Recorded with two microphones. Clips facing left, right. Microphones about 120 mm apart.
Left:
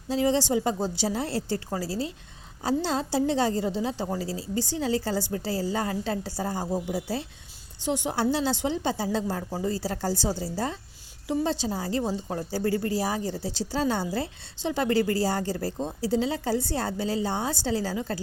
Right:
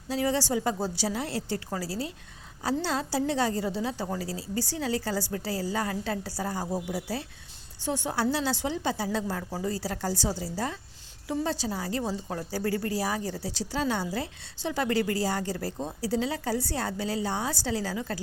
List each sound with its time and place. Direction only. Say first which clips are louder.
0.1 s a woman's voice: left 3 dB; 25° left (ahead or behind)